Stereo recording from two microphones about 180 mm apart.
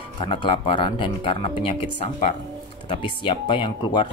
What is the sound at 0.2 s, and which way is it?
Speech, 30° left (ahead or behind).